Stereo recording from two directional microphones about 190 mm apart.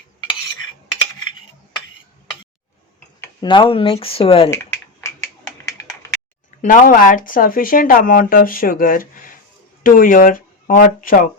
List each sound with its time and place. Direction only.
3.4 s speech: 25° left (ahead or behind)
4.5 s a sound: 15° left (ahead or behind)
6.6 s speech: 45° left (ahead or behind)